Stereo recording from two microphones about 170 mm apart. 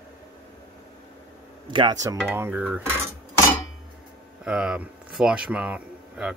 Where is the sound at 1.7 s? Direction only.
25° right (ahead or behind).